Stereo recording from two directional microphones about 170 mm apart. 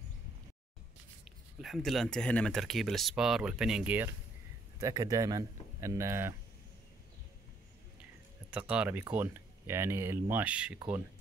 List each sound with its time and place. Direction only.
1.6 s speech: centre (ahead or behind)
4.7 s speech: 20° right (ahead or behind)
8.5 s speech: 5° right (ahead or behind)